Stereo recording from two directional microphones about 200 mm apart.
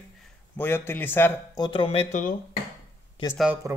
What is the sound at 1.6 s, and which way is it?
Speech, 25° left (ahead or behind).